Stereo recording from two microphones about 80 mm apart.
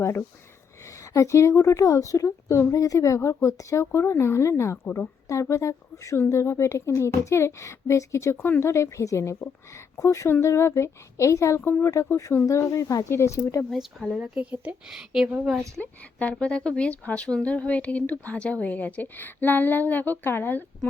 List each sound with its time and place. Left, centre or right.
0.0 s speech: left
13.1 s speech: left
13.7 s speech: centre
14.5 s speech: centre
15.8 s a woman's voice: centre